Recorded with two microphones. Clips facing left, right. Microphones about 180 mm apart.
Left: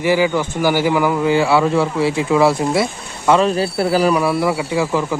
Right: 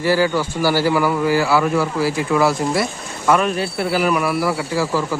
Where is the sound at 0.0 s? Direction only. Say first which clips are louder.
Left 1 dB; 15° left (ahead or behind).